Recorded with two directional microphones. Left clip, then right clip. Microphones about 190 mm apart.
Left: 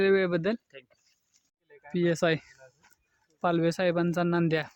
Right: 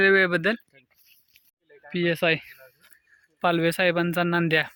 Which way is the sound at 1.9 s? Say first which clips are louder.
Right 3 dB; 5° left (ahead or behind).